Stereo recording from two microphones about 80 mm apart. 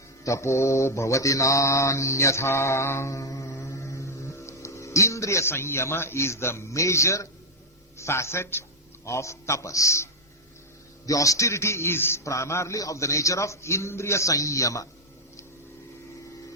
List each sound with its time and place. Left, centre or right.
0.3 s mantra: left
7.9 s a man's voice: left